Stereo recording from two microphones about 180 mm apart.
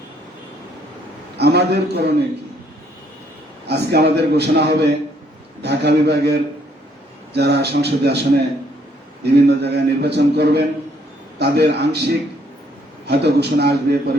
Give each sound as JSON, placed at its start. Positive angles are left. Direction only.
{"t": 1.4, "sound": "a man's voice", "side_deg": -65}
{"t": 3.7, "sound": "a man's voice", "side_deg": -65}